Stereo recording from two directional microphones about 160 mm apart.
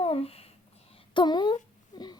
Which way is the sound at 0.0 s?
35° left (ahead or behind).